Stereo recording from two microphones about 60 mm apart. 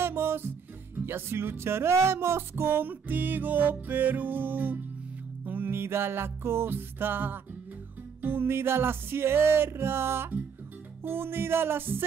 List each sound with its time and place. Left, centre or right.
0.0 s music: right